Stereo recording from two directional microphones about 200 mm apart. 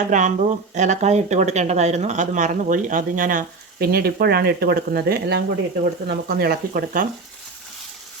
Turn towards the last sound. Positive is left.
turn(degrees=-45)  # may be behind; listen again after turning